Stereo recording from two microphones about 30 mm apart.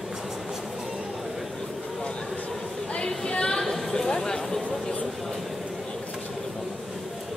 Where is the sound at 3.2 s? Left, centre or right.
Left.